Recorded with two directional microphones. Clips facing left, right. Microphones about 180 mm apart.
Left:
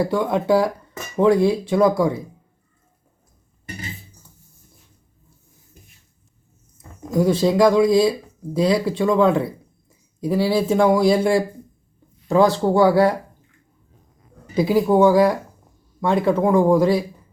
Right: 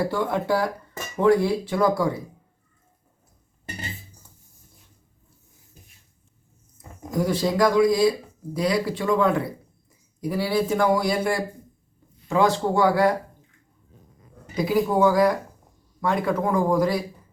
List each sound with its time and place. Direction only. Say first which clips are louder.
0.0 s speech: left 4 dB; 20° left (ahead or behind)
7.1 s speech: left 6 dB; 25° left (ahead or behind)
14.5 s speech: left 5 dB; 30° left (ahead or behind)